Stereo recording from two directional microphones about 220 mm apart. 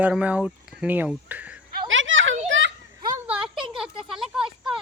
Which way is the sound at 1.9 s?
60° right (ahead or behind).